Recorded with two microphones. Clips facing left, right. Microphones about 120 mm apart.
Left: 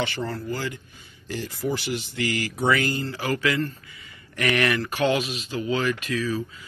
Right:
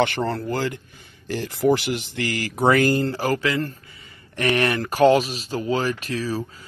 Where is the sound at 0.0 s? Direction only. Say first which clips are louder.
Right 6 dB; 60° right (ahead or behind).